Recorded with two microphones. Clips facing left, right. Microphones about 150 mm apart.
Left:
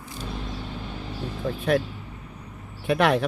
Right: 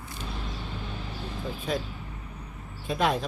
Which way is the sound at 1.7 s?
65° left (ahead or behind).